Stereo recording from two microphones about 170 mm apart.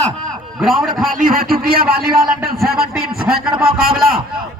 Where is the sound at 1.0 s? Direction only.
55° right (ahead or behind).